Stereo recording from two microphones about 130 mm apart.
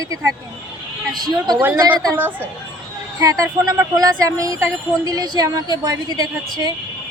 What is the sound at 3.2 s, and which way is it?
Speech, 25° right (ahead or behind).